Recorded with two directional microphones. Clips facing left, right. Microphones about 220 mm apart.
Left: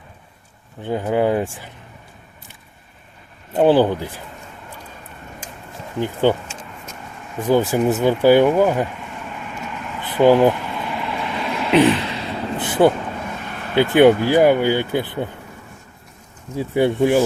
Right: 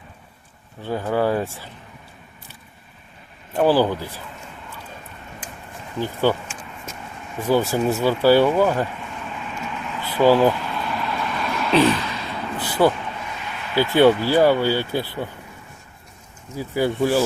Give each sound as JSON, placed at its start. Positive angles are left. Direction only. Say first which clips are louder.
{"t": 0.8, "sound": "speech", "louder": "left 3 dB", "side_deg": 20}
{"t": 3.5, "sound": "speech", "louder": "left 3 dB", "side_deg": 20}
{"t": 6.0, "sound": "speech", "louder": "left 3 dB", "side_deg": 20}
{"t": 9.9, "sound": "a sound", "louder": "left 3 dB", "side_deg": 15}
{"t": 13.3, "sound": "a sound", "louder": "left 3 dB", "side_deg": 50}
{"t": 14.3, "sound": "speech", "louder": "left 2 dB", "side_deg": 15}
{"t": 16.6, "sound": "speech", "louder": "left 4 dB", "side_deg": 25}